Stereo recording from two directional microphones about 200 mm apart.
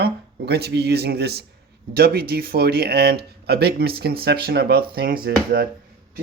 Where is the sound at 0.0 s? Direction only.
55° right (ahead or behind).